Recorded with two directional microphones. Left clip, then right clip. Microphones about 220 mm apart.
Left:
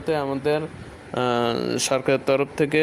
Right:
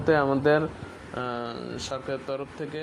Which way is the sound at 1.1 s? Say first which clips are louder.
Left 10 dB; 35° left (ahead or behind).